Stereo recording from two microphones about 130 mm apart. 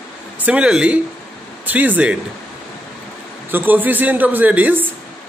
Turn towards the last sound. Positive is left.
turn(degrees=-15)  # may be behind; listen again after turning